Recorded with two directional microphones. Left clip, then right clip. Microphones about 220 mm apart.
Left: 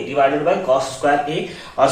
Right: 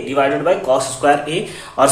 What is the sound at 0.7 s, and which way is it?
Speech, 50° right (ahead or behind).